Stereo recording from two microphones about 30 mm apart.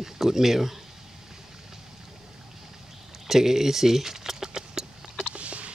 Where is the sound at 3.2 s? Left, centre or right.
Centre.